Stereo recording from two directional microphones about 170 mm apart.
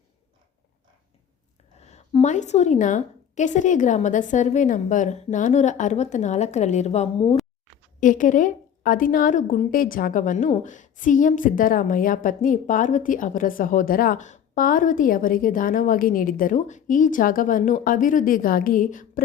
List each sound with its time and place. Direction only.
1.8 s a woman's voice: 40° left (ahead or behind)
8.0 s a woman's voice: 50° left (ahead or behind)